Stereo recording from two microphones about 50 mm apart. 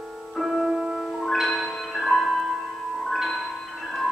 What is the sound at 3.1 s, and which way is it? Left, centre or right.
Marimba, centre.